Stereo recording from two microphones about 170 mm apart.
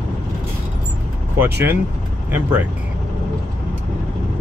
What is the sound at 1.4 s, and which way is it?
Speech, 15° right (ahead or behind).